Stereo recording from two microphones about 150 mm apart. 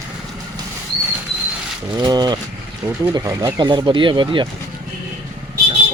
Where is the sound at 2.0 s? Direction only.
25° right (ahead or behind).